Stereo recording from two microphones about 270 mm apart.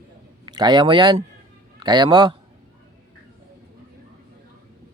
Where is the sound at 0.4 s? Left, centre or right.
Centre.